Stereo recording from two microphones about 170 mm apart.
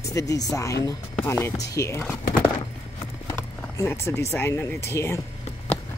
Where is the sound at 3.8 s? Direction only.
15° left (ahead or behind).